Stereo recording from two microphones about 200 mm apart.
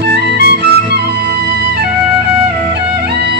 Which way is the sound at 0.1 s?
55° right (ahead or behind).